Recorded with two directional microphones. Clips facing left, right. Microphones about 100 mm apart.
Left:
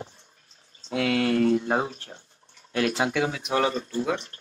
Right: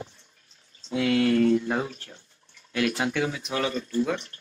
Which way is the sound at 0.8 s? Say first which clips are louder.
Right 1 dB; 50° left (ahead or behind).